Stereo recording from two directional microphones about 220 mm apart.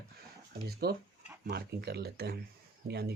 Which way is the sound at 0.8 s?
45° right (ahead or behind).